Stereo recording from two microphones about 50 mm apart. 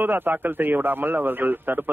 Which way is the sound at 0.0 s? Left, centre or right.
Right.